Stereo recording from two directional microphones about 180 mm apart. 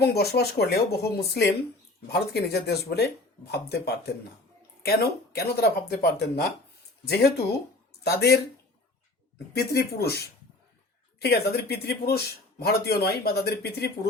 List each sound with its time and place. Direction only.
0.0 s speech: 60° left (ahead or behind)
9.6 s speech: 60° left (ahead or behind)